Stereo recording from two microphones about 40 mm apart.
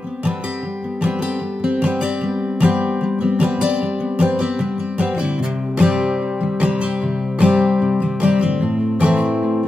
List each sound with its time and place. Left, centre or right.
1.6 s music: right
5.8 s music: right
8.0 s music: right